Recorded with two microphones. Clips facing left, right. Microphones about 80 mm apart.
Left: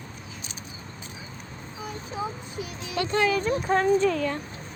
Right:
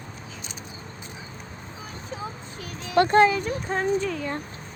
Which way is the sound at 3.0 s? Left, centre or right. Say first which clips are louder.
Right 9 dB; right.